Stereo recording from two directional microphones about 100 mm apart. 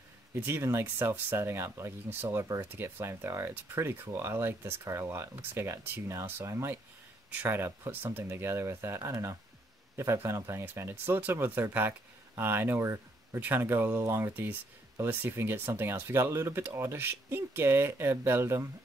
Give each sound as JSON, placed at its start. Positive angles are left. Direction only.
{"t": 0.3, "sound": "speech", "side_deg": -25}